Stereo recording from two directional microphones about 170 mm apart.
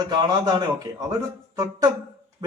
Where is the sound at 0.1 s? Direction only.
25° right (ahead or behind).